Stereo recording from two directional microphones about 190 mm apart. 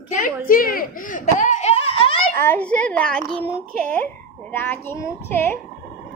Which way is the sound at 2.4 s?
10° left (ahead or behind).